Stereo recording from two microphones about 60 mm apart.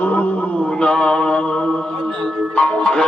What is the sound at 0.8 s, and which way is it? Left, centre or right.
Mantra, centre.